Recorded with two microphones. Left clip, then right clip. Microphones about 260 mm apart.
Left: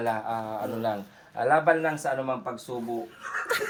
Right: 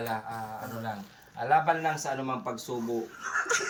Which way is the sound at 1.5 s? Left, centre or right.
Centre.